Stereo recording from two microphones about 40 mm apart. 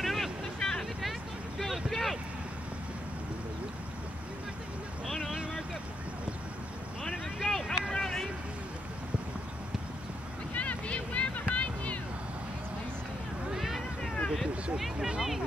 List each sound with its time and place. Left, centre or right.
0.0 s vehicle: centre
0.6 s vehicle: centre
1.9 s boat: centre
5.0 s vehicle: centre
7.3 s vehicle: centre
10.5 s a sound: left
13.6 s vehicle: centre
15.1 s a sound: centre